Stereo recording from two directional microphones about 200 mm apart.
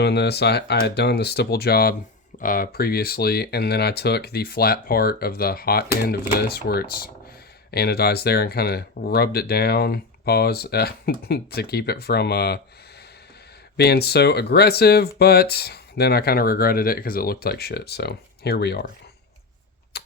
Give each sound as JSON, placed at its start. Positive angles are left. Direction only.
{"t": 0.0, "sound": "speech", "side_deg": 55}
{"t": 13.7, "sound": "speech", "side_deg": 55}
{"t": 19.9, "sound": "typewriter", "side_deg": 55}